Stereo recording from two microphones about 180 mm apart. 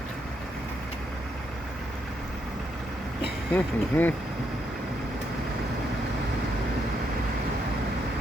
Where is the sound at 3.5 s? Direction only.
10° left (ahead or behind).